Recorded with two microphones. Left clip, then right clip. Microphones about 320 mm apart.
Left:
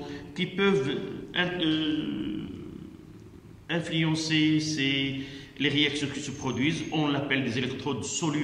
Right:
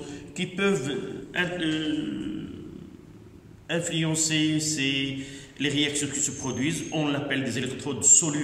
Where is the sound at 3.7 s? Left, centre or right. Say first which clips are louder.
Right 1 dB; centre.